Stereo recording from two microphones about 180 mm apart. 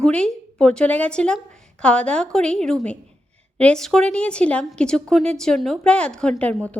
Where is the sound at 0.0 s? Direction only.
5° left (ahead or behind).